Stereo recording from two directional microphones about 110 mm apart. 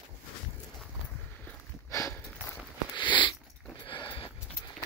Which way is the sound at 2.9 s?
45° left (ahead or behind).